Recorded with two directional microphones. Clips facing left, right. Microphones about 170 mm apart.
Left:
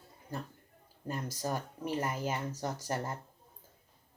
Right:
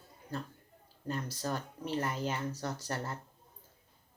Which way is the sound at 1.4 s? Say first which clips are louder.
Left 2 dB; 15° left (ahead or behind).